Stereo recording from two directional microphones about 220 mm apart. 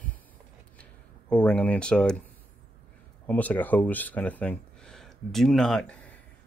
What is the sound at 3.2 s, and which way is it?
Speech, 5° left (ahead or behind).